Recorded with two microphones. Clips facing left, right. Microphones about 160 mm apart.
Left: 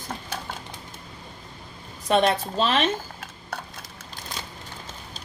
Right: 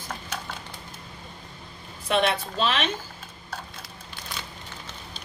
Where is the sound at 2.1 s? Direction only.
35° left (ahead or behind).